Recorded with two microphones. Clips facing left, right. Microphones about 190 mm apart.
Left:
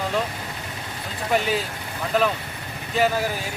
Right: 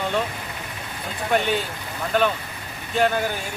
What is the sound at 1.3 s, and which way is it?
Speech, centre (ahead or behind).